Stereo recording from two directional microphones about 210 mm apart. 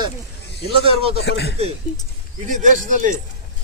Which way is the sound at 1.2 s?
55° left (ahead or behind).